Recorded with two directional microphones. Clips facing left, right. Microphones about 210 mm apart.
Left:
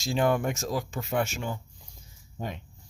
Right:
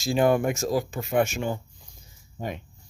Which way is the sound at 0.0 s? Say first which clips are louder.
Right 4 dB; 10° right (ahead or behind).